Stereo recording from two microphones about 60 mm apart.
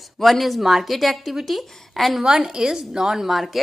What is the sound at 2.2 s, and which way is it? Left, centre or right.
A woman's voice, centre.